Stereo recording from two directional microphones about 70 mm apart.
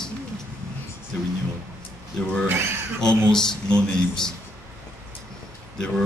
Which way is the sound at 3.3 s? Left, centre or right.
Centre.